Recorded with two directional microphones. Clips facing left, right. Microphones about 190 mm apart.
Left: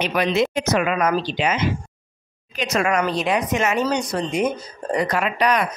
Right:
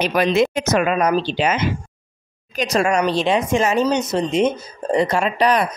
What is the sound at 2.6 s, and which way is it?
Speech, 30° right (ahead or behind).